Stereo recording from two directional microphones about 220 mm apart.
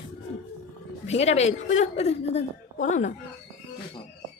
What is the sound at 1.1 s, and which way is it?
A woman's voice, 30° left (ahead or behind).